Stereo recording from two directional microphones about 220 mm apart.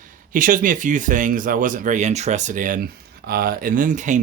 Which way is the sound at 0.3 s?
35° right (ahead or behind).